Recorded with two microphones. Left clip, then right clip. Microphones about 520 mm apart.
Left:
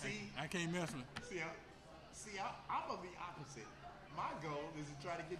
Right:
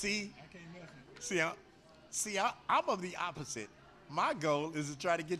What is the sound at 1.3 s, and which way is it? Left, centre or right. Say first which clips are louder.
A man's voice: right 14 dB; right.